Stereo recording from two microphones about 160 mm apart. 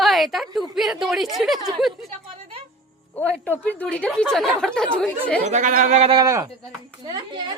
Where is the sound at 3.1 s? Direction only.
10° left (ahead or behind).